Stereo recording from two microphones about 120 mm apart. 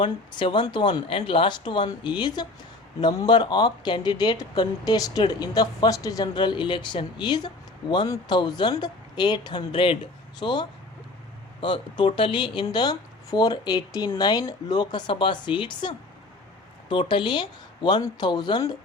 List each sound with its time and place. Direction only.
0.0 s speech: 40° left (ahead or behind)